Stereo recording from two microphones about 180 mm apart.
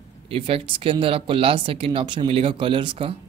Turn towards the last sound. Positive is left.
turn(degrees=-30)  # may be behind; listen again after turning